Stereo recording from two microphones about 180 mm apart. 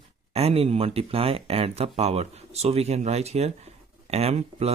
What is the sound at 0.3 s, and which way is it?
Speech, 35° right (ahead or behind).